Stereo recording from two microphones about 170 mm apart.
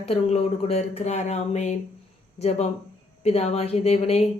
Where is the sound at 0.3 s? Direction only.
40° left (ahead or behind).